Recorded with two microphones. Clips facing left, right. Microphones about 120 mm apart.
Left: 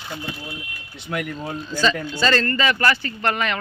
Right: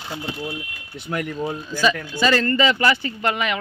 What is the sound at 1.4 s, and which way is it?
Speech, 5° right (ahead or behind).